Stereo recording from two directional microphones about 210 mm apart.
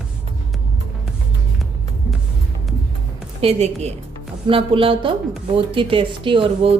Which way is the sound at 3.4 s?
30° right (ahead or behind).